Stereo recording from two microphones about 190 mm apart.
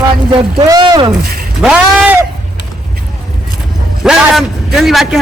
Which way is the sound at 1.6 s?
5° right (ahead or behind).